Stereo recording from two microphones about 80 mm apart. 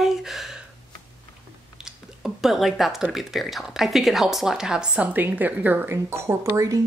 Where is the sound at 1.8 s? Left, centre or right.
Centre.